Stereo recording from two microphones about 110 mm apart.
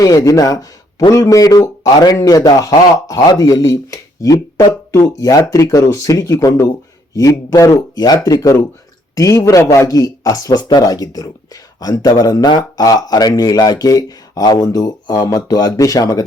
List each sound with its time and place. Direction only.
0.0 s speech: 30° left (ahead or behind)